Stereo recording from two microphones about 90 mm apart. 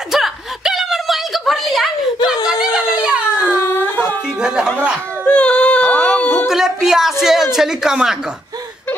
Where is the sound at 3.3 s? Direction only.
30° left (ahead or behind).